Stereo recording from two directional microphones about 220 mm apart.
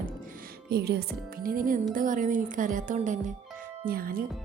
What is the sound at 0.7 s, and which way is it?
Speech, 45° right (ahead or behind).